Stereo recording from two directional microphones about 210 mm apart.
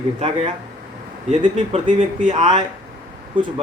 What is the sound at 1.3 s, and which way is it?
Speech, 30° right (ahead or behind).